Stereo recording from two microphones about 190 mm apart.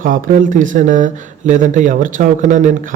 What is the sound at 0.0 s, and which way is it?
Speech, 45° right (ahead or behind).